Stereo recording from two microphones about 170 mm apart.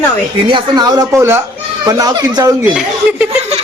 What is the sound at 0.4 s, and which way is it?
Speech, 25° right (ahead or behind).